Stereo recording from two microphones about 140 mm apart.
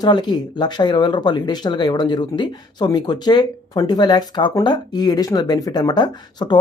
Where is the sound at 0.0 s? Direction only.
30° left (ahead or behind).